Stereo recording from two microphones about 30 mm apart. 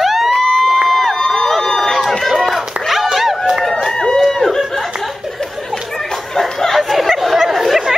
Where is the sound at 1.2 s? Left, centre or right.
Centre.